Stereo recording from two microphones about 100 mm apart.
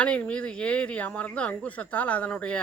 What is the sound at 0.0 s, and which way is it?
Speech, 10° left (ahead or behind).